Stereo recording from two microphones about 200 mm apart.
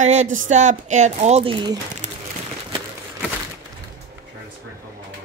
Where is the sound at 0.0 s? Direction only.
35° right (ahead or behind).